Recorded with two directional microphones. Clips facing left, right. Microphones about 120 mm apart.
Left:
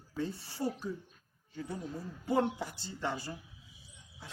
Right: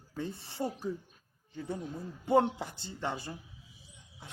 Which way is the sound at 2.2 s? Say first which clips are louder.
Right 4 dB; 25° right (ahead or behind).